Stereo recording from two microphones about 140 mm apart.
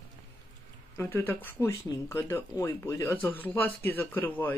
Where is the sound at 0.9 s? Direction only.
15° left (ahead or behind).